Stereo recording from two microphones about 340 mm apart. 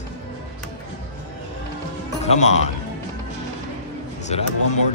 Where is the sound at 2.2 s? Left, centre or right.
Centre.